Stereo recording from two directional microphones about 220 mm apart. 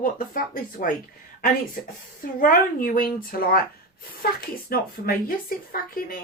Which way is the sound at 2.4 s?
40° left (ahead or behind).